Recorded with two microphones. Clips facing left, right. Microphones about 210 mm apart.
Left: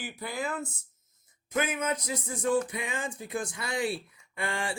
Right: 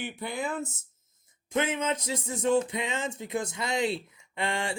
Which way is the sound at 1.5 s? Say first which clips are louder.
Right 2 dB; 25° right (ahead or behind).